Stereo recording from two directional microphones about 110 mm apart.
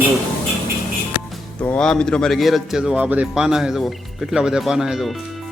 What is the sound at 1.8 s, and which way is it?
Speech, 5° left (ahead or behind).